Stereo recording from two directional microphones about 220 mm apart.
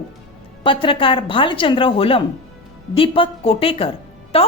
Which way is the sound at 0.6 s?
25° left (ahead or behind).